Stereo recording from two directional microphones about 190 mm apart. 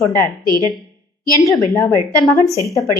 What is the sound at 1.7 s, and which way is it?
Speech, 20° left (ahead or behind).